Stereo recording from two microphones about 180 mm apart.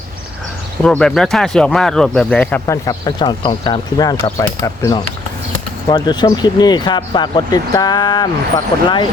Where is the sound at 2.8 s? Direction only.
25° left (ahead or behind).